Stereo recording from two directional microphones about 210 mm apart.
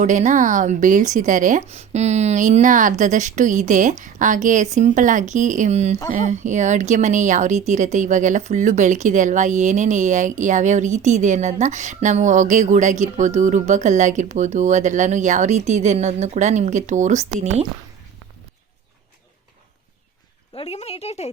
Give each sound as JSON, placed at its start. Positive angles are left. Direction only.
{"t": 0.0, "sound": "speech", "side_deg": -35}
{"t": 20.6, "sound": "speech", "side_deg": 30}